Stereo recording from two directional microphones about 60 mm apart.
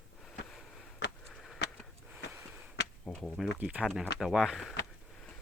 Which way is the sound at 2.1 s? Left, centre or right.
Right.